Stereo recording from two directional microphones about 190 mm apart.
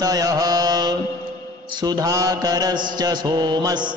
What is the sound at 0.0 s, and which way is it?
Mantra, 20° right (ahead or behind).